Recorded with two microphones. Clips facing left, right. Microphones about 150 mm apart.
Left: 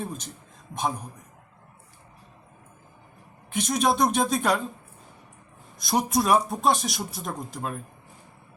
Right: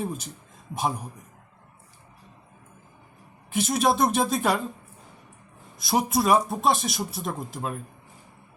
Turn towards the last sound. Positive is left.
turn(degrees=0)  # may be behind; listen again after turning